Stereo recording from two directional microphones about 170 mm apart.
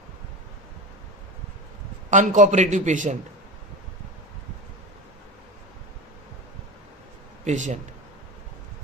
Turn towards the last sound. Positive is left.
turn(degrees=-45)  # may be behind; listen again after turning